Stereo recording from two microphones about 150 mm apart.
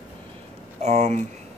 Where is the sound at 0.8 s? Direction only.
50° right (ahead or behind).